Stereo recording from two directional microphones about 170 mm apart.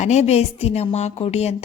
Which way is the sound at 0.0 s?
40° left (ahead or behind).